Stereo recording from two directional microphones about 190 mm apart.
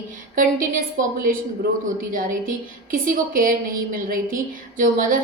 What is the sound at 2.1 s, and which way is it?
A woman's voice, 45° right (ahead or behind).